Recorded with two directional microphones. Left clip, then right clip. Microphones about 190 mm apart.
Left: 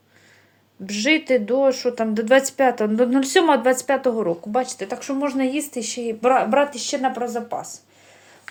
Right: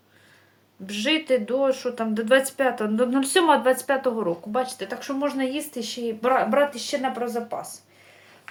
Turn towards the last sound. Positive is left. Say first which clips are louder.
# left 2 dB
turn(degrees=35)  # may be behind; listen again after turning